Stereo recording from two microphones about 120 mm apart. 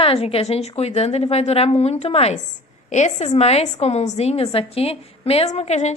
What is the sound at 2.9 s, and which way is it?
A woman's voice, 75° left (ahead or behind).